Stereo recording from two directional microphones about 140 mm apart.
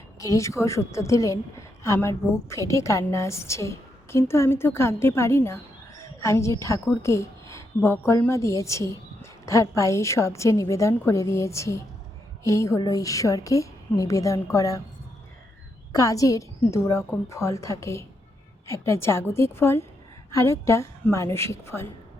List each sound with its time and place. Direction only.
0.2 s a woman's voice: 20° left (ahead or behind)
15.9 s a woman's voice: 25° left (ahead or behind)